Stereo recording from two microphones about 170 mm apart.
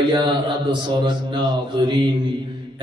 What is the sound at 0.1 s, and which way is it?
A man's voice, 30° right (ahead or behind).